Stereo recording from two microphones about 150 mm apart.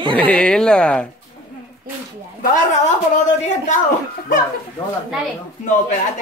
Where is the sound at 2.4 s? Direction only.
55° left (ahead or behind).